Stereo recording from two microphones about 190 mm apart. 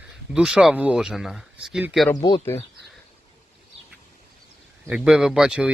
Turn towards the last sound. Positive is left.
turn(degrees=-5)  # may be behind; listen again after turning